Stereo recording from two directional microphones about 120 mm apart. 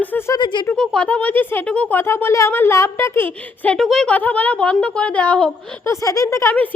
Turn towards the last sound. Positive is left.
turn(degrees=25)  # may be behind; listen again after turning